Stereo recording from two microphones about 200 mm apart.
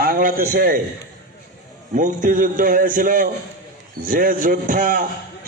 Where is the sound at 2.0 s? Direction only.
40° right (ahead or behind).